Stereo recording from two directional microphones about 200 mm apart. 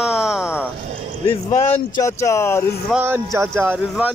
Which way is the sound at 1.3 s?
20° left (ahead or behind).